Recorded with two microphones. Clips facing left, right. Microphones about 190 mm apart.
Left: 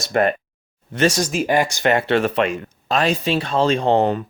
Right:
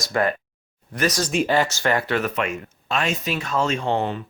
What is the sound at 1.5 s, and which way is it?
Speech, 15° left (ahead or behind).